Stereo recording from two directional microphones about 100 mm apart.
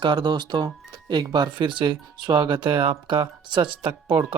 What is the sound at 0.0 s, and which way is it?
Speech, 50° right (ahead or behind).